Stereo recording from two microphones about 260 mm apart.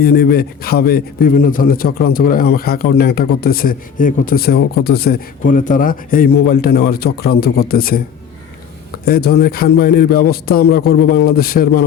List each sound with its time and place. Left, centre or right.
0.0 s a man's voice: left
9.0 s a man's voice: left